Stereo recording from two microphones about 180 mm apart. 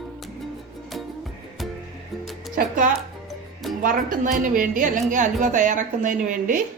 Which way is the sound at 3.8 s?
50° right (ahead or behind).